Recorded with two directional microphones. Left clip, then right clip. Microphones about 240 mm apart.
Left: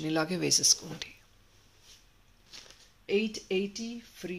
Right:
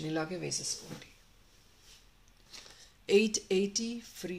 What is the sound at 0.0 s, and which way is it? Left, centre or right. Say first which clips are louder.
Speech: left 5 dB; left.